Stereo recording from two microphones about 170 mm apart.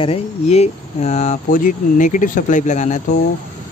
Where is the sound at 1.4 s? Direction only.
50° left (ahead or behind).